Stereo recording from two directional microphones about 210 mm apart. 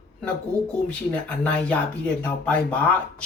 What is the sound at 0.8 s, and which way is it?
Speech, 5° left (ahead or behind).